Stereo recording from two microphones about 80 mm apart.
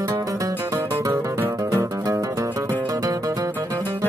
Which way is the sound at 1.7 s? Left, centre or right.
Right.